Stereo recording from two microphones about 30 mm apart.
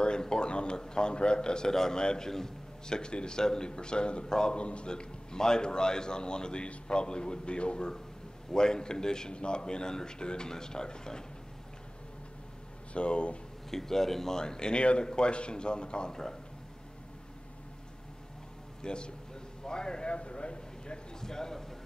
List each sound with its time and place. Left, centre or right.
0.0 s a sound: left
0.7 s a man's voice: left
3.0 s a man's voice: left
4.6 s a man's voice: left
8.5 s a man's voice: left
12.9 s a man's voice: left
13.7 s speech: centre
14.4 s a man's voice: left
16.1 s a man's voice: left
18.8 s a man's voice: left
20.1 s speech: left
21.2 s a sound: centre